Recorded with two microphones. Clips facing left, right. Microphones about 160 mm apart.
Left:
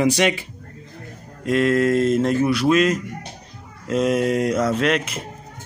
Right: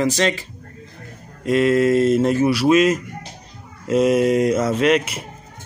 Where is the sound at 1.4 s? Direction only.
5° right (ahead or behind).